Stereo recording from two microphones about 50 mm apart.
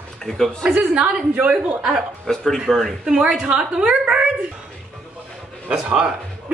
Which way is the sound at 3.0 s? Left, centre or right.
Centre.